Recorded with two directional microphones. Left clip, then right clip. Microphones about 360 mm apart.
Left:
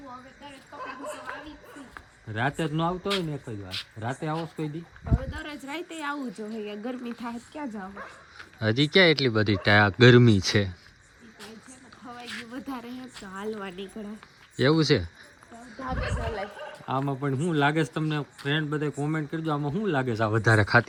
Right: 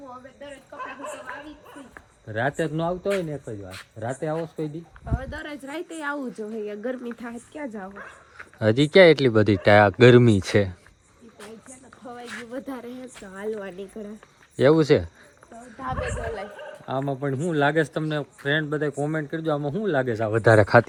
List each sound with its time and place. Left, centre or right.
2.3 s speech: centre
12.0 s a sound: centre
12.5 s speech: centre
16.0 s speech: centre
16.8 s speech: centre